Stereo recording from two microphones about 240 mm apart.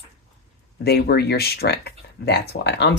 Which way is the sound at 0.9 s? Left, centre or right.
Left.